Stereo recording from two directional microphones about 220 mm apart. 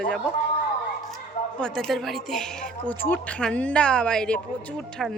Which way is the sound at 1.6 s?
5° left (ahead or behind).